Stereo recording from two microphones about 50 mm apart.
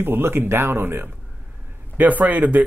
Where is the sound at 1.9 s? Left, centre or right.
Right.